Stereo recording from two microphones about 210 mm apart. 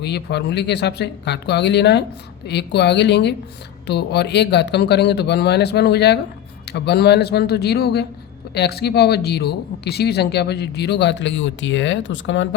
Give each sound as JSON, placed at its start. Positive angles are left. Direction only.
{"t": 0.0, "sound": "speech", "side_deg": 50}